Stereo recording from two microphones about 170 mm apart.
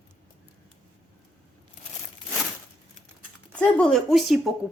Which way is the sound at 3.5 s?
5° left (ahead or behind).